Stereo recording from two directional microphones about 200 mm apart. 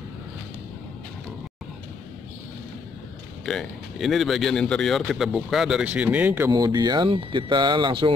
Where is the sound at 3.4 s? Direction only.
Centre (ahead or behind).